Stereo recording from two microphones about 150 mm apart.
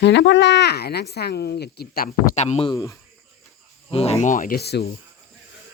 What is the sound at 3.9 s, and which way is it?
Speech, 40° left (ahead or behind).